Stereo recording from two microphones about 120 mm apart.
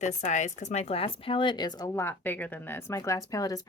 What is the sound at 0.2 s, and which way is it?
Speech, 85° left.